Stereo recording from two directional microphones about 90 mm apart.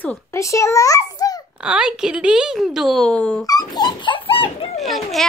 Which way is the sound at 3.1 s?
10° left (ahead or behind).